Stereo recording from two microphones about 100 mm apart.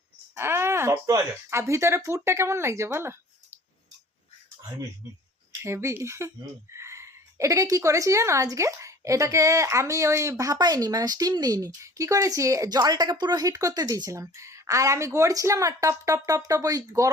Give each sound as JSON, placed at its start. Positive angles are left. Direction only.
{"t": 0.3, "sound": "a sound", "side_deg": -25}
{"t": 1.5, "sound": "speech", "side_deg": -30}
{"t": 5.0, "sound": "a woman's voice", "side_deg": -25}